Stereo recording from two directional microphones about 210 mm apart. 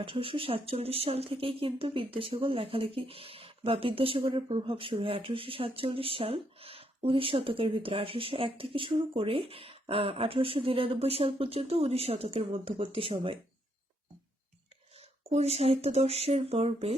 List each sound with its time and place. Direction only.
0.0 s speech: 25° right (ahead or behind)
14.9 s speech: 30° right (ahead or behind)